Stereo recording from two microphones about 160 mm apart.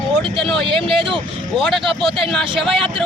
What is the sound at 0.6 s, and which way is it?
Speech, 30° right (ahead or behind).